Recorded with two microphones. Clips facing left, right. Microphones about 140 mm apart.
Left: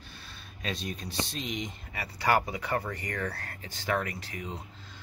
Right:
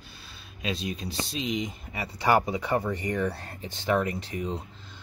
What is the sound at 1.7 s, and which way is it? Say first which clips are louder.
Speech: right 4 dB; 15° right (ahead or behind).